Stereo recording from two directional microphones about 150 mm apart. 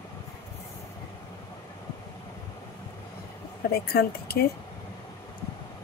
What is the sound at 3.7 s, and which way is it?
Speech, 90° left.